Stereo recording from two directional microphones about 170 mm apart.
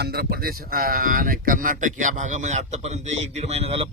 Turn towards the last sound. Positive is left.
turn(degrees=-35)  # may be behind; listen again after turning